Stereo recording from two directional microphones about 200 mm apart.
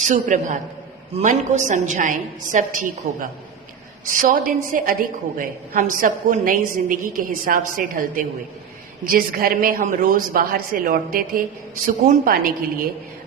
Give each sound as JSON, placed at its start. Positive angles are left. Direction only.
{"t": 0.1, "sound": "a woman's voice", "side_deg": -40}